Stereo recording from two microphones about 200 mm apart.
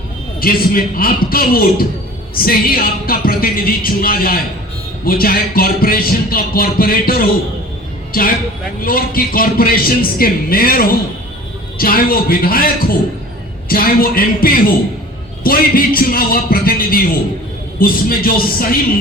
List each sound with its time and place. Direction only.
0.3 s music: 45° left (ahead or behind)